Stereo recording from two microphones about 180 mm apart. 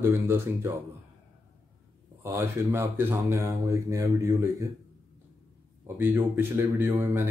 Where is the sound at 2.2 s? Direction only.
15° right (ahead or behind).